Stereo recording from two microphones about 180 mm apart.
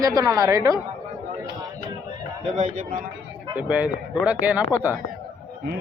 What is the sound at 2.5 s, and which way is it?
Speech, 40° right (ahead or behind).